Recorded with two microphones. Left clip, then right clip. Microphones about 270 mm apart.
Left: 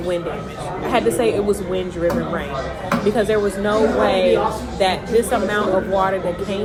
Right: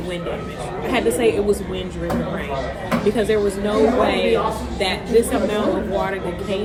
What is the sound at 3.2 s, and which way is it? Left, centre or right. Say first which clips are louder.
Speech: left 1 dB; left.